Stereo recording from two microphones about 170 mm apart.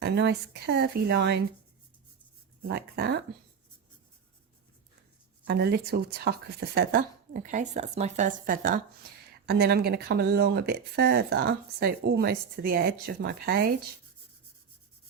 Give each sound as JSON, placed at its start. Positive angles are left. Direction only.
{"t": 0.0, "sound": "a woman's voice", "side_deg": -75}
{"t": 2.6, "sound": "speech", "side_deg": -70}
{"t": 5.5, "sound": "speech", "side_deg": -70}
{"t": 9.5, "sound": "speech", "side_deg": -70}